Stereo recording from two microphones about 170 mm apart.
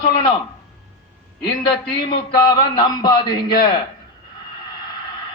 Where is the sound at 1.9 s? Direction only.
30° left (ahead or behind).